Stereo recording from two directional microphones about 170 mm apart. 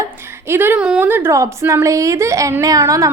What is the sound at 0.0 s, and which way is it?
A woman's voice, 15° right (ahead or behind).